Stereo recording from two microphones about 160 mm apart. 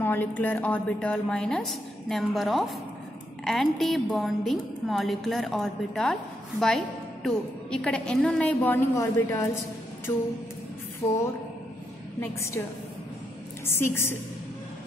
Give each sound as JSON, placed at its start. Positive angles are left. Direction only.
{"t": 0.0, "sound": "a woman's voice", "side_deg": 10}
{"t": 7.2, "sound": "a woman's voice", "side_deg": 5}
{"t": 13.7, "sound": "a woman's voice", "side_deg": 15}